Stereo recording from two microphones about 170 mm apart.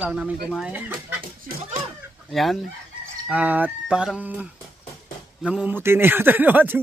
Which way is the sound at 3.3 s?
10° right (ahead or behind).